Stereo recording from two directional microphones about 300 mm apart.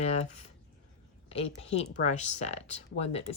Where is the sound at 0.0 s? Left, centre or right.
Left.